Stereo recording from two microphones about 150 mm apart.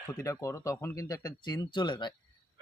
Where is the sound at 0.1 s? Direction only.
20° left (ahead or behind).